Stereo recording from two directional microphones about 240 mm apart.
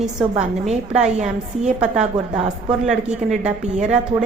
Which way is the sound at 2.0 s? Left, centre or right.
Right.